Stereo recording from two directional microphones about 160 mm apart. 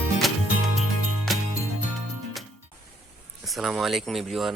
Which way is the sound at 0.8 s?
Centre (ahead or behind).